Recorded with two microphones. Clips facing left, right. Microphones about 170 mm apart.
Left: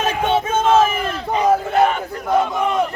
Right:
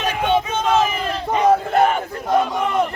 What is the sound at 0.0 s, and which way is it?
Battle cry, 45° left (ahead or behind).